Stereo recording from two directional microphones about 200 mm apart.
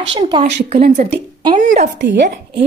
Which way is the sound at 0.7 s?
45° right (ahead or behind).